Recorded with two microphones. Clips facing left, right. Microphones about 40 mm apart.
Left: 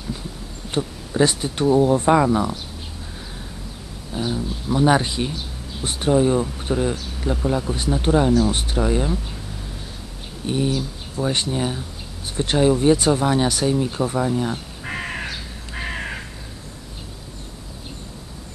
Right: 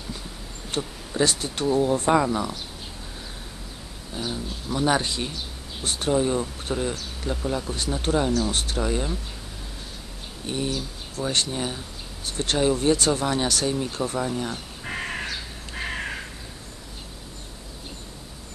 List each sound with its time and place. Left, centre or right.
0.7 s speech: centre
4.1 s speech: centre
10.4 s speech: centre
12.4 s a sound: centre